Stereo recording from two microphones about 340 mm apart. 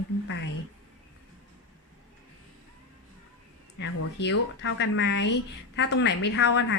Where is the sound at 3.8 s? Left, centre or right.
Left.